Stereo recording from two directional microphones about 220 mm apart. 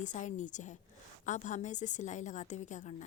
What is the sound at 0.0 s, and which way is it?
A woman's voice, 35° left (ahead or behind).